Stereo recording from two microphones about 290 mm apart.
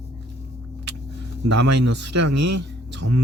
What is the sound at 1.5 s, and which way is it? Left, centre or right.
Speech, right.